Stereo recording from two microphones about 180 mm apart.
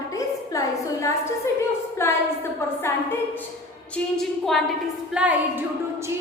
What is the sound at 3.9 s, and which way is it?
A woman's voice, centre (ahead or behind).